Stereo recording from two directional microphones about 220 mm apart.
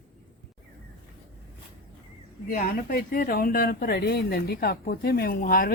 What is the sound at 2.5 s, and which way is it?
Speech, 40° left (ahead or behind).